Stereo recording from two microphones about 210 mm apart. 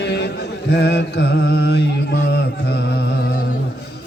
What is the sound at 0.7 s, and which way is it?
Mantra, 55° left (ahead or behind).